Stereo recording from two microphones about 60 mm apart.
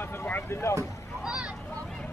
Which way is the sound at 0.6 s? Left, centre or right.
Left.